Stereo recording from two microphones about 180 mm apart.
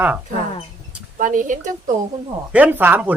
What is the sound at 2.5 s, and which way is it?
Speech, 10° right (ahead or behind).